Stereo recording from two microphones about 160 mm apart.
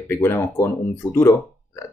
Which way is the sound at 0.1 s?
15° left (ahead or behind).